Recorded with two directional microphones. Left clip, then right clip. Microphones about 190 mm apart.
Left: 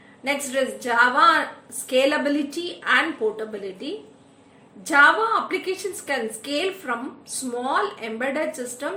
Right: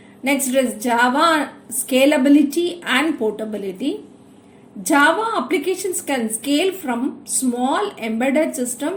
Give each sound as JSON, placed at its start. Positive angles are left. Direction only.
{"t": 0.3, "sound": "a woman's voice", "side_deg": -40}